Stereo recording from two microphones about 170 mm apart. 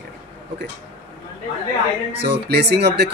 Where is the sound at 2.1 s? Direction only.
80° right.